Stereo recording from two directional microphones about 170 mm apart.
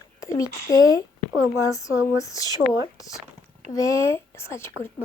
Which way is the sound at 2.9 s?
20° left (ahead or behind).